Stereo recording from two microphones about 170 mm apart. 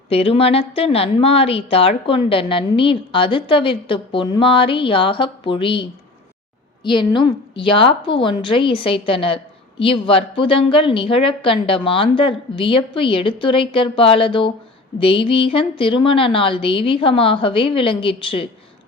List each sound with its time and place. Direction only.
0.1 s a woman's voice: 35° left (ahead or behind)